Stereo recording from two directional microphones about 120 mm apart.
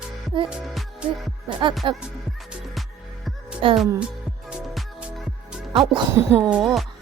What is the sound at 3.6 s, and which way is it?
Speech, 45° right (ahead or behind).